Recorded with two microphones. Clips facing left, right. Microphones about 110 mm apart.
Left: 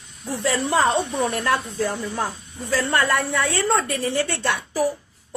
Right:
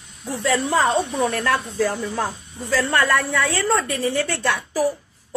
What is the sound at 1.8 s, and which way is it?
A woman's voice, 20° left (ahead or behind).